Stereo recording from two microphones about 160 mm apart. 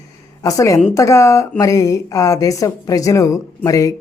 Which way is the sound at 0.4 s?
20° left (ahead or behind).